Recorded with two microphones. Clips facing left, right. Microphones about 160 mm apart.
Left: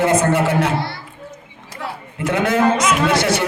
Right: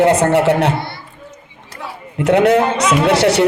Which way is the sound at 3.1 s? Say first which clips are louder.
Right 5 dB; 70° right (ahead or behind).